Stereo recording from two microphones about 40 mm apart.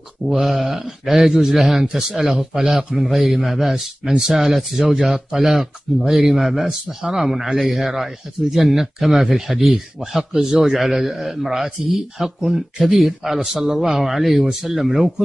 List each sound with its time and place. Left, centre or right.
0.3 s speech: centre